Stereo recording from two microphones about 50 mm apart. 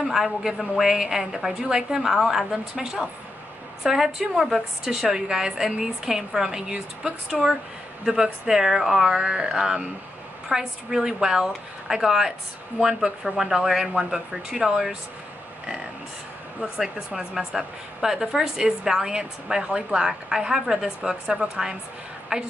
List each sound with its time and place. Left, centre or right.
0.0 s a woman's voice: centre
6.7 s speech: right
7.2 s a woman's voice: centre
16.7 s a woman's voice: centre
22.3 s speech: right